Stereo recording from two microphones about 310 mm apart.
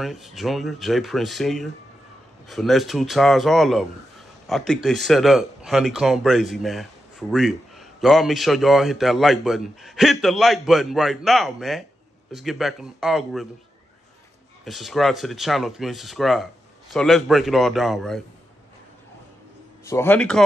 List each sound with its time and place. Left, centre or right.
0.0 s a man's voice: centre
14.6 s speech: centre
19.8 s speech: centre